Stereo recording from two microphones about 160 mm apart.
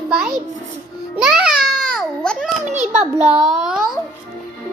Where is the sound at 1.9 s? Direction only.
5° left (ahead or behind).